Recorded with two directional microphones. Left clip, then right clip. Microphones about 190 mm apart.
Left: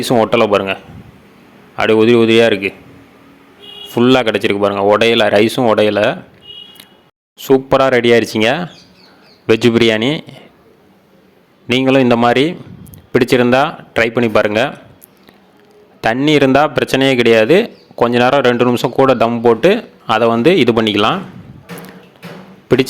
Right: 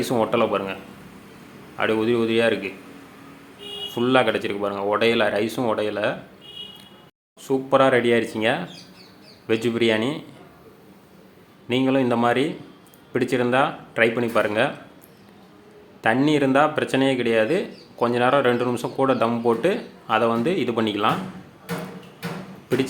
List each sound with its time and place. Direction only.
0.0 s speech: 40° left (ahead or behind)
1.8 s speech: 40° left (ahead or behind)
3.8 s speech: 40° left (ahead or behind)
7.3 s speech: 45° left (ahead or behind)
11.7 s speech: 50° left (ahead or behind)
16.1 s speech: 45° left (ahead or behind)